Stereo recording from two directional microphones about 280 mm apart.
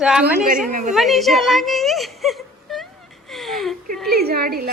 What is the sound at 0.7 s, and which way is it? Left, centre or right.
Speech, right.